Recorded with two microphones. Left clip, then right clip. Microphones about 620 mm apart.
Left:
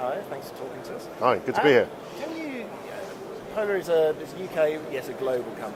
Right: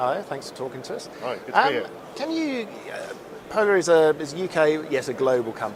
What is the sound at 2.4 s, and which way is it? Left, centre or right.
Speech, right.